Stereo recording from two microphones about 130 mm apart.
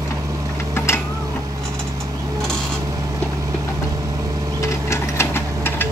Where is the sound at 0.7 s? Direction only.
20° left (ahead or behind).